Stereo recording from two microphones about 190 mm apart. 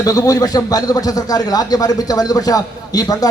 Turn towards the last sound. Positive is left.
turn(degrees=20)  # may be behind; listen again after turning